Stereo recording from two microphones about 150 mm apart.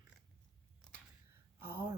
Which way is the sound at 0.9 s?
5° left (ahead or behind).